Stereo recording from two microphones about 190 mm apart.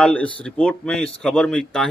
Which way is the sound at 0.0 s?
5° left (ahead or behind).